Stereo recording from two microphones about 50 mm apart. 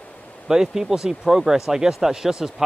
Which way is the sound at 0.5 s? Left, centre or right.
Centre.